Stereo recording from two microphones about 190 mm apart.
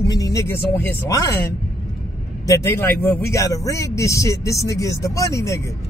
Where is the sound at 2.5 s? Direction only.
10° left (ahead or behind).